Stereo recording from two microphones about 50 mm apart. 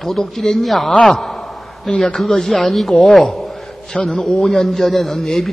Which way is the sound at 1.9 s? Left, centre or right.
Centre.